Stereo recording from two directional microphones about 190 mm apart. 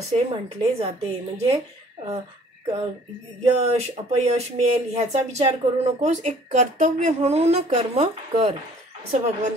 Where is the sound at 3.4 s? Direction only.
35° right (ahead or behind).